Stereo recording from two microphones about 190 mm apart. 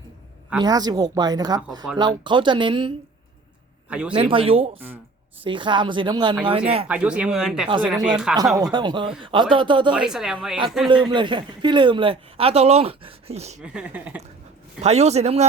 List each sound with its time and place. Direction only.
0.6 s a man's voice: 20° right (ahead or behind)
3.8 s a man's voice: 5° right (ahead or behind)
4.1 s a man's voice: 30° right (ahead or behind)
6.8 s speech: 5° right (ahead or behind)
8.7 s a man's voice: 25° right (ahead or behind)
9.9 s speech: 5° right (ahead or behind)
10.8 s a man's voice: 25° right (ahead or behind)
13.6 s speech: 5° right (ahead or behind)
14.8 s speech: 35° right (ahead or behind)